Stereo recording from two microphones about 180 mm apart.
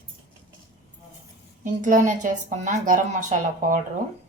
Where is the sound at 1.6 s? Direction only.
45° right (ahead or behind).